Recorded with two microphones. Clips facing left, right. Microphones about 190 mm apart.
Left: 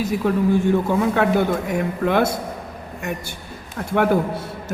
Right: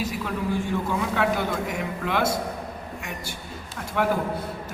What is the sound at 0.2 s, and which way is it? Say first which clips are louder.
A man's voice: left 12 dB; 50° left (ahead or behind).